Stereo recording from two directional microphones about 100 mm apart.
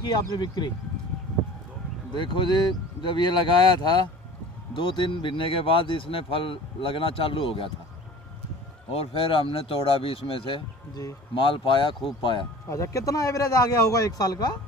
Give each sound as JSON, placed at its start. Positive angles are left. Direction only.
{"t": 0.1, "sound": "speech", "side_deg": 45}
{"t": 2.1, "sound": "speech", "side_deg": 50}
{"t": 8.9, "sound": "speech", "side_deg": 75}
{"t": 12.6, "sound": "a man's voice", "side_deg": 30}